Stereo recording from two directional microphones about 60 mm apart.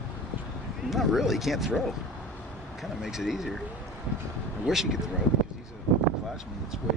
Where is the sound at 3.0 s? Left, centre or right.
Centre.